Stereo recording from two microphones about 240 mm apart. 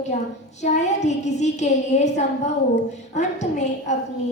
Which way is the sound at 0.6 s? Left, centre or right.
Left.